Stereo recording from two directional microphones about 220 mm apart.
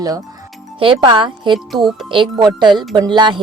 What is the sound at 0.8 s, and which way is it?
Speech, 20° right (ahead or behind).